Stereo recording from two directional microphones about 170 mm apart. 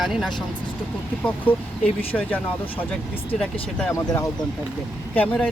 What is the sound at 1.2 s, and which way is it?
Speech, 10° left (ahead or behind).